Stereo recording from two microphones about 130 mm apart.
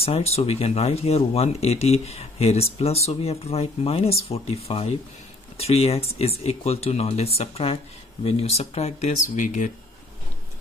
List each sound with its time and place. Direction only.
0.0 s speech: 50° left (ahead or behind); by 9.7 s 75° left (ahead or behind)